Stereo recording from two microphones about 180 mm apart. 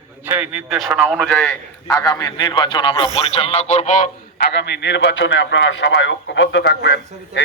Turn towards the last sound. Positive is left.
turn(degrees=75)  # may be behind; listen again after turning